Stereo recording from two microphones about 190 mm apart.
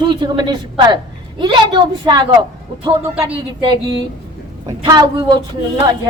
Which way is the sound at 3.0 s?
10° right (ahead or behind).